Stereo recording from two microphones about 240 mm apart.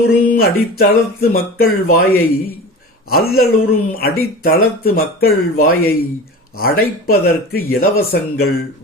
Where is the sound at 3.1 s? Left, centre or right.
Left.